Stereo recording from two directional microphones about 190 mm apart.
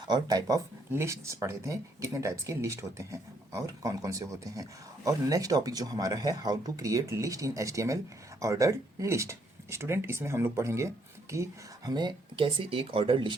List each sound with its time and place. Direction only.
0.1 s speech: 20° right (ahead or behind)